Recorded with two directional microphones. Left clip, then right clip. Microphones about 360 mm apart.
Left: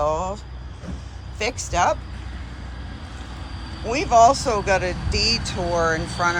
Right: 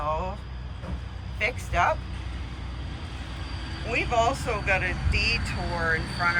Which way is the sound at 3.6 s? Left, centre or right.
Left.